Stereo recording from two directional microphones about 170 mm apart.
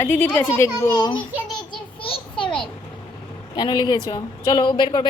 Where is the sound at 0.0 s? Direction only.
10° left (ahead or behind).